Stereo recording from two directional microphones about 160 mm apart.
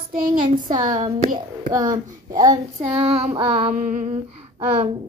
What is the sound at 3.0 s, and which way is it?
Speech, 40° right (ahead or behind).